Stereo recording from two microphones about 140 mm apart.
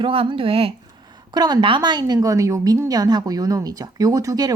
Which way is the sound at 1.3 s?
30° right (ahead or behind).